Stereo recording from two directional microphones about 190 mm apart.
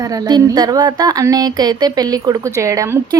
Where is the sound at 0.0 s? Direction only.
20° right (ahead or behind).